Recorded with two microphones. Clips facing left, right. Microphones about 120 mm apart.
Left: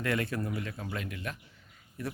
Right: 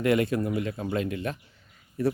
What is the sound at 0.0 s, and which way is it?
Speech, 15° right (ahead or behind).